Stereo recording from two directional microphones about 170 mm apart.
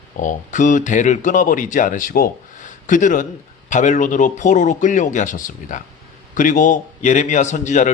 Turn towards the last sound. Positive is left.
turn(degrees=45)  # may be behind; listen again after turning